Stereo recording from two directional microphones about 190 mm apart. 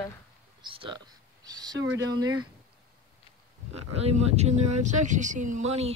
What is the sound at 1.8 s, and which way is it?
Speech, 90° right.